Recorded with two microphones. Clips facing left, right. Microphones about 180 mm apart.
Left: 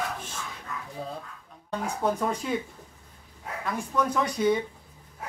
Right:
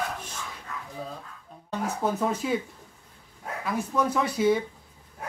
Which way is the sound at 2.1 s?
5° right (ahead or behind).